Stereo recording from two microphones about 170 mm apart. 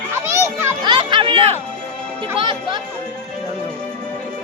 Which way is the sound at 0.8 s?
25° right (ahead or behind).